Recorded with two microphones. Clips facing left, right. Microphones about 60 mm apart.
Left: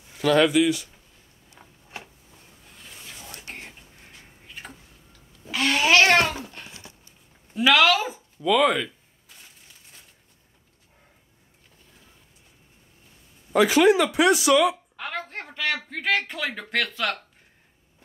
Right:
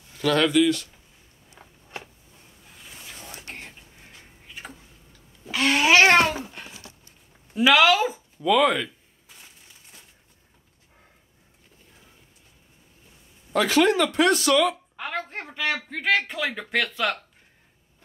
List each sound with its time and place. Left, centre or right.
0.1 s speech: centre
1.6 s a sound: centre
5.9 s babbling: centre
6.6 s patter: centre
7.5 s speech: centre
13.5 s speech: centre
15.0 s a sound: centre
15.5 s speech: centre